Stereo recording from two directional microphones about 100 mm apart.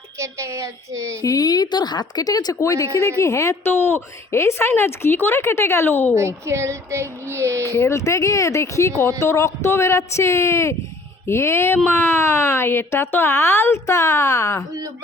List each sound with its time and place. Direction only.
0.2 s speech: 30° right (ahead or behind)
1.2 s a woman's voice: 40° left (ahead or behind); by 6.1 s 20° left (ahead or behind)
6.1 s speech: 30° right (ahead or behind)
7.7 s a woman's voice: 30° left (ahead or behind)